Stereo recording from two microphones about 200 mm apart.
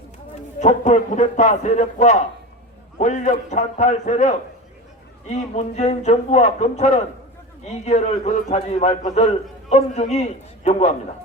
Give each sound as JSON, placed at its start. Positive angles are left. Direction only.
{"t": 0.6, "sound": "a man's voice", "side_deg": 35}